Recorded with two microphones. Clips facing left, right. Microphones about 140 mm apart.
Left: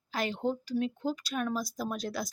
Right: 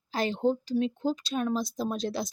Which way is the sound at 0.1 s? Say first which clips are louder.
Right 5 dB; 30° right (ahead or behind).